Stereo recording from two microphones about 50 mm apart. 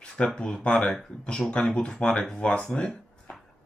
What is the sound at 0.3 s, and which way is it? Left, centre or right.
Speech, centre.